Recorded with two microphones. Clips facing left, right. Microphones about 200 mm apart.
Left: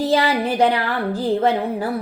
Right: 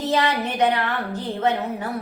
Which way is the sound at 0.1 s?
35° left (ahead or behind).